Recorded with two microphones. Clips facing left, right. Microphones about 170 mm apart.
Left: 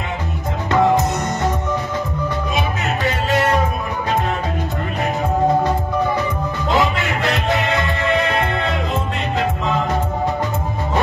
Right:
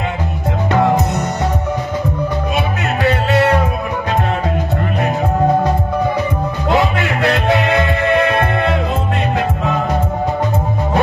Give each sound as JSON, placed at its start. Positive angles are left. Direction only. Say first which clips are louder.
{"t": 2.5, "sound": "music", "louder": "right 3 dB", "side_deg": -65}
{"t": 6.7, "sound": "music", "louder": "right 3 dB", "side_deg": -60}